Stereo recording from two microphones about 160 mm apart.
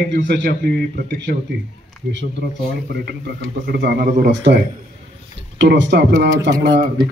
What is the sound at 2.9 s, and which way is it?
A man's voice, 90° right.